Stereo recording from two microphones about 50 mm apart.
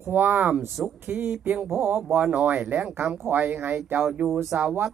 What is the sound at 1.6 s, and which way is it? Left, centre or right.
Speech, right.